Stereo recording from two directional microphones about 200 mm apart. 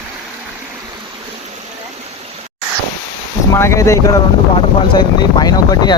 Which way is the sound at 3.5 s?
15° left (ahead or behind).